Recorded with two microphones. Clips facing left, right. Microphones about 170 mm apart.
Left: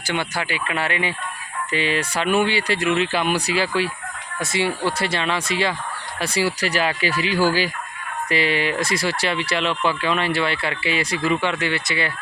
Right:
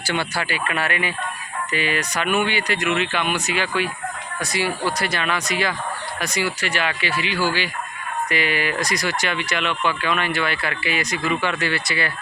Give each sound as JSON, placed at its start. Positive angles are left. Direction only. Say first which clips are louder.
{"t": 0.1, "sound": "speech", "louder": "even", "side_deg": 20}
{"t": 8.3, "sound": "speech", "louder": "left 3 dB", "side_deg": 30}